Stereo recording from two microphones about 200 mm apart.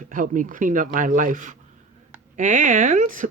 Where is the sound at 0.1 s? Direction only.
40° right (ahead or behind).